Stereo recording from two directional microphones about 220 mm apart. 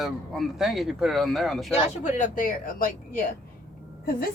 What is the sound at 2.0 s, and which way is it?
Speech, 35° left (ahead or behind).